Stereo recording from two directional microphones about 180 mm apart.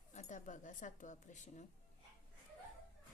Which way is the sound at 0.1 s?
40° left (ahead or behind).